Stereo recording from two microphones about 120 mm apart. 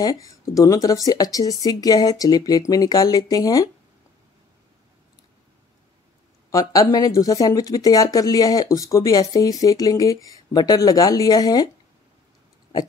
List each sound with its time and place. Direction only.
0.0 s speech: 30° left (ahead or behind)
6.5 s speech: 30° left (ahead or behind)